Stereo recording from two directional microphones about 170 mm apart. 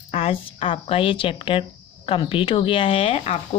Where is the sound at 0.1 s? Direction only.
35° left (ahead or behind).